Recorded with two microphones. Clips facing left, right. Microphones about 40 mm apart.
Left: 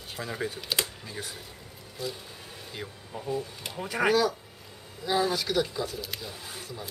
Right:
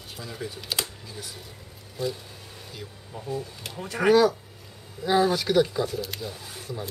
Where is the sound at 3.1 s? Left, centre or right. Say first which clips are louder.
Even; centre.